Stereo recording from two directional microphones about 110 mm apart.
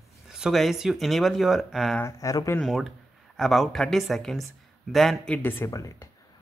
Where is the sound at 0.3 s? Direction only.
Centre (ahead or behind).